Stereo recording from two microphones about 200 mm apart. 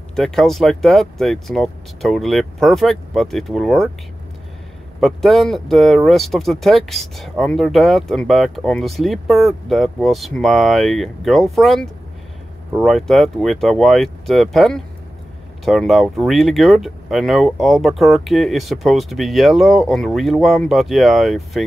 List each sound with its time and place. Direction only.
0.1 s speech: centre (ahead or behind)
5.0 s speech: centre (ahead or behind)